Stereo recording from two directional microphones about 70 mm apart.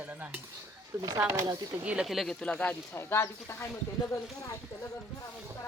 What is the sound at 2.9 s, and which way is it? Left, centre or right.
Speech, left.